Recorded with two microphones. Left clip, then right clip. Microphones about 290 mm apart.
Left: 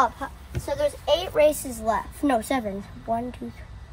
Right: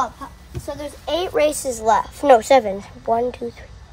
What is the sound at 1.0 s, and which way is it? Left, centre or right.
A woman's voice, centre.